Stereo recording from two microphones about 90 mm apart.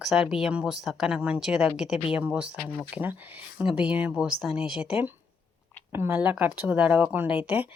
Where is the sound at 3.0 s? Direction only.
20° right (ahead or behind).